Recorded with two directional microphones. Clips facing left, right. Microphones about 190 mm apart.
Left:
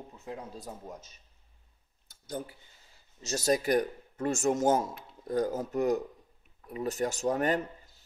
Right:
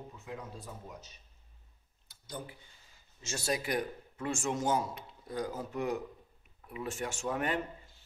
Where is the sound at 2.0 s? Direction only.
45° left (ahead or behind).